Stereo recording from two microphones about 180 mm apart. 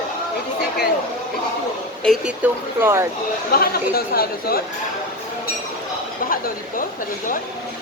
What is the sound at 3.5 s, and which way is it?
Speech, 55° left (ahead or behind).